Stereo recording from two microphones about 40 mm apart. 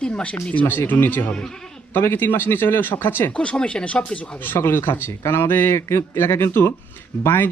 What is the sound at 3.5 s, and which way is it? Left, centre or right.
Speech, left.